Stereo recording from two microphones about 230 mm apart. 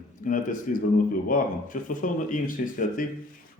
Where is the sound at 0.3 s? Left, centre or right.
Left.